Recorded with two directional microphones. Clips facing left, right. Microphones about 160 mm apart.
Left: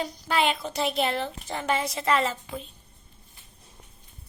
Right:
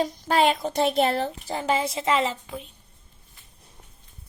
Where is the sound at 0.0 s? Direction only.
40° right (ahead or behind).